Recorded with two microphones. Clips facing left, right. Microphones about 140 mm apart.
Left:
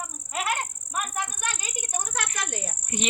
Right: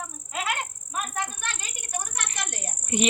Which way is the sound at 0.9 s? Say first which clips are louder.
Even; 5° left (ahead or behind).